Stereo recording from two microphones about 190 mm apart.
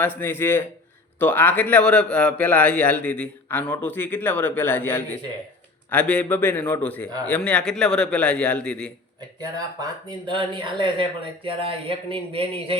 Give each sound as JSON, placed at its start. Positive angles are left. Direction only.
{"t": 0.2, "sound": "a man's voice", "side_deg": 10}
{"t": 9.8, "sound": "speech", "side_deg": -25}